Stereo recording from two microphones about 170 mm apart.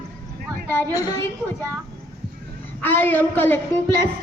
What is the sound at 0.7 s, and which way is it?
Speech, 15° left (ahead or behind).